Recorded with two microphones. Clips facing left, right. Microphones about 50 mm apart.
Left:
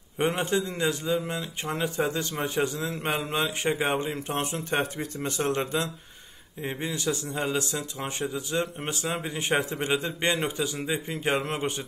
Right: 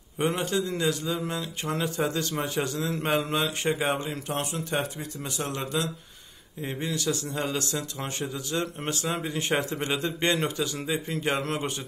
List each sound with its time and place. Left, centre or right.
0.2 s a man's voice: left
7.3 s a man's voice: centre
8.2 s a man's voice: left